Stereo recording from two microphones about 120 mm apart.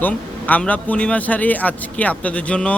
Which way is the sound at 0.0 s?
15° left (ahead or behind).